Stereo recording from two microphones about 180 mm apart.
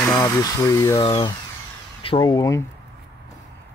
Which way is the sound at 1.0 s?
30° left (ahead or behind).